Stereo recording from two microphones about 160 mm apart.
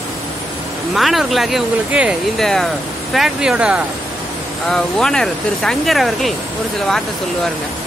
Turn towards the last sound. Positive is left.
turn(degrees=0)  # may be behind; listen again after turning